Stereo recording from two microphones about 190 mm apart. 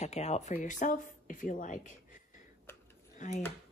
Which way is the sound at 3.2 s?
40° left (ahead or behind).